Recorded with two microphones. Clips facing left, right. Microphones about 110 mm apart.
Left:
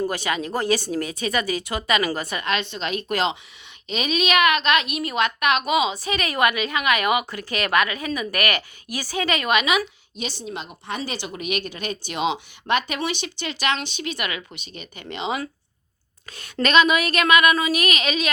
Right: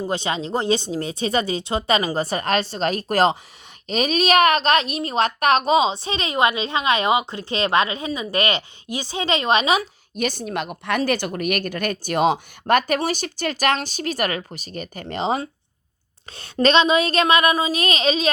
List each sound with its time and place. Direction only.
0.1 s a woman's voice: 25° right (ahead or behind)
10.2 s a woman's voice: 55° right (ahead or behind); by 18.3 s 30° right (ahead or behind)